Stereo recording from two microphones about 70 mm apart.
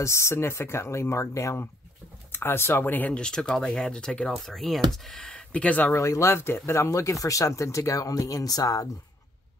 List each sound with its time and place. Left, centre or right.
0.0 s speech: left
2.3 s speech: left
3.2 s speech: centre
5.9 s speech: left